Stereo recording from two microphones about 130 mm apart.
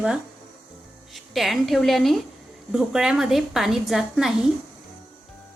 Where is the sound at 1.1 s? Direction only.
Centre (ahead or behind).